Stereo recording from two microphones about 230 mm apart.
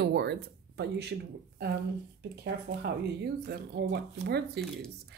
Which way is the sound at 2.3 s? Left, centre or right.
Right.